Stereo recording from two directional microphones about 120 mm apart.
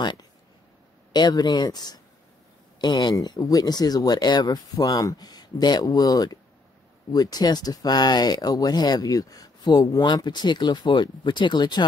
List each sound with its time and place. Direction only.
0.0 s speech: 40° left (ahead or behind)